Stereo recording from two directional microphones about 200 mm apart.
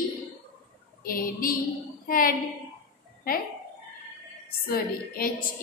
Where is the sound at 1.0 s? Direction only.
45° left (ahead or behind).